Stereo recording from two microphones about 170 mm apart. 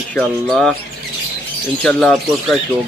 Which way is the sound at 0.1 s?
5° left (ahead or behind).